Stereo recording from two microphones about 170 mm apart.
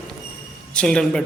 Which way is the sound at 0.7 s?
5° left (ahead or behind).